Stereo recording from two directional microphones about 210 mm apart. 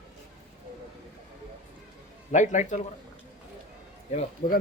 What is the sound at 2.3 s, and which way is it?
Speech, 35° left (ahead or behind).